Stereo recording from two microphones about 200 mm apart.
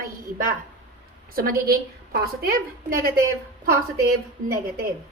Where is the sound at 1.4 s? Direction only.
45° right (ahead or behind).